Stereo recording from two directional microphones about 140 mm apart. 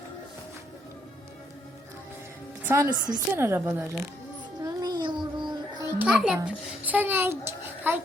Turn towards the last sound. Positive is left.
turn(degrees=-15)  # may be behind; listen again after turning